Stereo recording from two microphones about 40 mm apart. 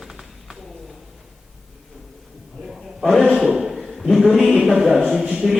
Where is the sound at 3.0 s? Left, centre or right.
Centre.